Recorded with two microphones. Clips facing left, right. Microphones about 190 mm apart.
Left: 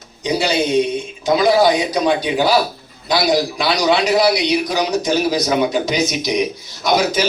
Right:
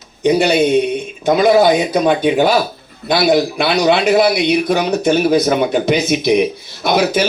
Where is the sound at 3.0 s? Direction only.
55° right (ahead or behind).